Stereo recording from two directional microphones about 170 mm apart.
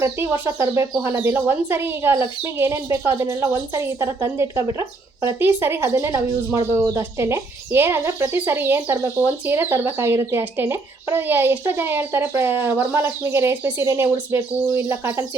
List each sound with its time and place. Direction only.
0.0 s speech: 15° right (ahead or behind)